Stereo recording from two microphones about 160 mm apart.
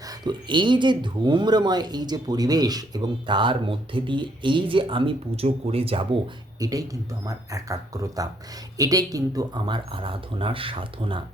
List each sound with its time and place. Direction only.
0.1 s speech: 30° right (ahead or behind)
6.6 s speech: 20° right (ahead or behind)